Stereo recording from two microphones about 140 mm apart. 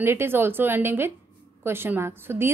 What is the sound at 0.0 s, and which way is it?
A woman's voice, 15° right (ahead or behind).